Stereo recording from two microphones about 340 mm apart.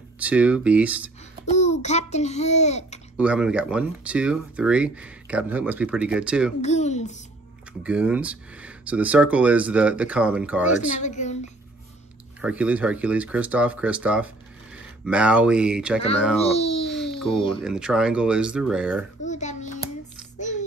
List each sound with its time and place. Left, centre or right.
0.2 s speech: centre
1.5 s a child's voice: centre
3.2 s speech: centre
6.6 s a child's voice: centre
7.8 s speech: centre
11.0 s a child's voice: left
12.4 s speech: centre
16.3 s a child's voice: centre
16.9 s a sound: centre
17.6 s speech: centre
19.2 s a sound: left
20.3 s child singing: left